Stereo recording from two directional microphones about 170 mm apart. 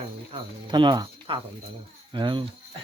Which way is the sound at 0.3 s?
30° right (ahead or behind).